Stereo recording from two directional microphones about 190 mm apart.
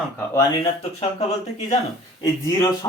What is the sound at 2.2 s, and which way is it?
Speech, 15° left (ahead or behind).